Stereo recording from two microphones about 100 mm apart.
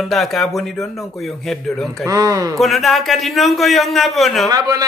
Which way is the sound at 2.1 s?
35° right (ahead or behind).